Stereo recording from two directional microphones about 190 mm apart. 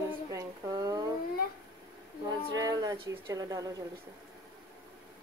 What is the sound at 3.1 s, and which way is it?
Speech, 20° right (ahead or behind).